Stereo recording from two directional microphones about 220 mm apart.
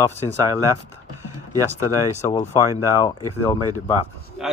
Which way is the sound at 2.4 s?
15° left (ahead or behind).